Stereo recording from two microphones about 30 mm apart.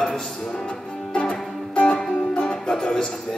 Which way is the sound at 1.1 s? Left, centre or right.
Left.